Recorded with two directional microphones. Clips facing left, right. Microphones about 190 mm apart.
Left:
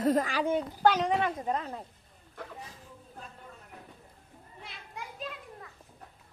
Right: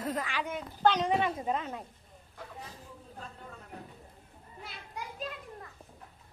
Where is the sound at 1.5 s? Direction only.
35° left (ahead or behind).